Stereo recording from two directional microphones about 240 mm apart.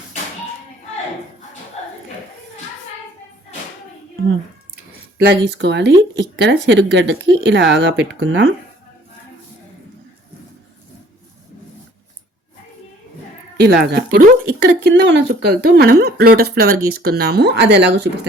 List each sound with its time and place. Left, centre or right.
5.1 s speech: right
13.6 s speech: right